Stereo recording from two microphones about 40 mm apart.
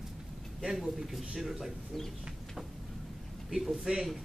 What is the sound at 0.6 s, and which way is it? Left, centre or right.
Speech, centre.